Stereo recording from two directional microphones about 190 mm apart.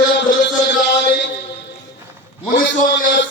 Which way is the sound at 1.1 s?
60° left (ahead or behind).